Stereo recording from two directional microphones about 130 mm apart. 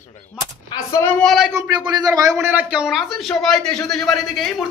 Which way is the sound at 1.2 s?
Centre (ahead or behind).